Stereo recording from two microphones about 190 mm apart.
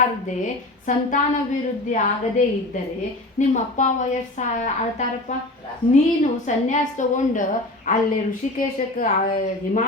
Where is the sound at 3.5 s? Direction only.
40° left (ahead or behind).